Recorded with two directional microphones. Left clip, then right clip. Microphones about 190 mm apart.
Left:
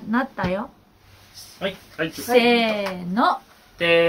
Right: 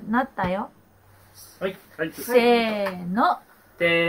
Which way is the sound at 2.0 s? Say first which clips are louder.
Left 2 dB; 15° left (ahead or behind).